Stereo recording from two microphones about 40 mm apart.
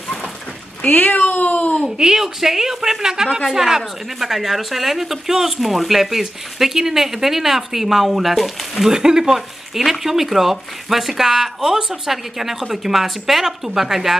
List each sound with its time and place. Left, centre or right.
0.8 s speech: left
2.0 s a woman's voice: centre
3.3 s a woman's voice: centre
8.9 s a woman's voice: centre